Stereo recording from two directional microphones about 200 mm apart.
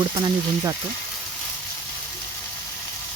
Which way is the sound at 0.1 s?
20° right (ahead or behind).